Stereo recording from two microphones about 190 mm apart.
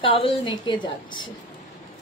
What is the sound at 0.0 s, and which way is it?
A woman's voice, 25° left (ahead or behind).